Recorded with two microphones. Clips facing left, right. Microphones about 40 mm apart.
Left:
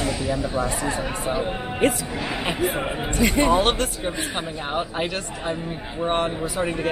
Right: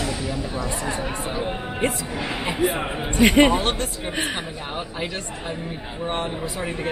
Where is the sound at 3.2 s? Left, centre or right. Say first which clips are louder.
Right 4 dB; right.